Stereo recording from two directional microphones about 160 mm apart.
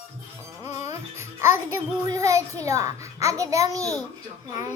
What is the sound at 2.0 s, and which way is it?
A child's voice, 20° right (ahead or behind).